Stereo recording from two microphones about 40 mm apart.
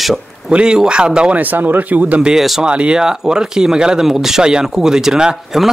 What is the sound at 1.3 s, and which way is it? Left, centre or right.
Speech, right.